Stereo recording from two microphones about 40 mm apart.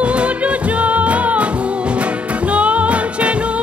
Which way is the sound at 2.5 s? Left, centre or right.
Right.